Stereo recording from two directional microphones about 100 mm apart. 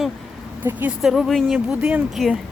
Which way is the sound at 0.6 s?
15° right (ahead or behind).